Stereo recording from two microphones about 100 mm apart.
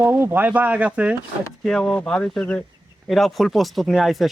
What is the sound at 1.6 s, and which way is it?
Speech, 5° left (ahead or behind).